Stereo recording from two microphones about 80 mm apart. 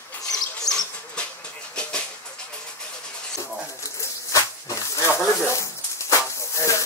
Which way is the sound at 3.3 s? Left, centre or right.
Left.